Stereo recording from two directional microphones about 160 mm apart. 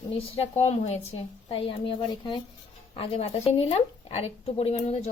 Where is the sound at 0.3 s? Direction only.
45° left (ahead or behind).